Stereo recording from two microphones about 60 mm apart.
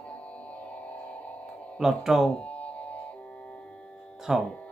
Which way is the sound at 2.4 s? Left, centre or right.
Left.